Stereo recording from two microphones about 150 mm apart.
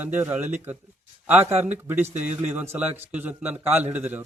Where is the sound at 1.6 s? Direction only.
15° right (ahead or behind).